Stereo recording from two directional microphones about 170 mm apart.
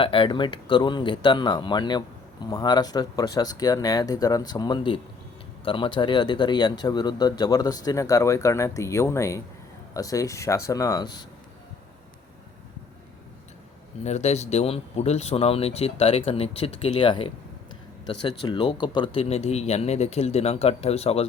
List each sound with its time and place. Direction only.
0.0 s speech: 30° left (ahead or behind)
14.0 s speech: 40° left (ahead or behind)